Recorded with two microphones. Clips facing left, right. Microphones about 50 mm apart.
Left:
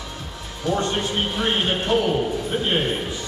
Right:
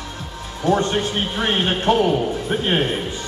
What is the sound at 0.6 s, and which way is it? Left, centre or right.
A man's voice, right.